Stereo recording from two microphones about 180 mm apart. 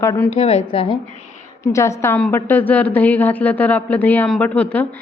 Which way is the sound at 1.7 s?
15° left (ahead or behind).